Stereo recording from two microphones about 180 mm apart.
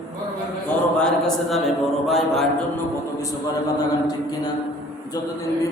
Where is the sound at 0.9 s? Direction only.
5° left (ahead or behind).